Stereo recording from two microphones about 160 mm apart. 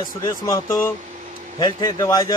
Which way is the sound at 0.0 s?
25° left (ahead or behind).